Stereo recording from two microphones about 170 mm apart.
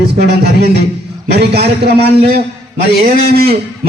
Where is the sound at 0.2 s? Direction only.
70° right (ahead or behind).